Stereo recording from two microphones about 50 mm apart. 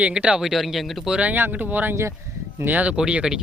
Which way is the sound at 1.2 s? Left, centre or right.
Right.